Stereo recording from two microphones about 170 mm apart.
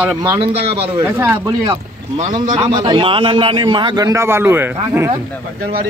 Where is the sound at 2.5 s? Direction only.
30° right (ahead or behind); by 5.0 s 10° right (ahead or behind).